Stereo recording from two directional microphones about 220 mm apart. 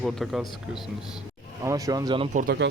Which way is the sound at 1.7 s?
15° right (ahead or behind).